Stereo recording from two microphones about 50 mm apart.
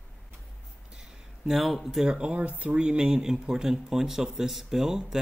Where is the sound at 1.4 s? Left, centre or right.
Centre; by 2.7 s right.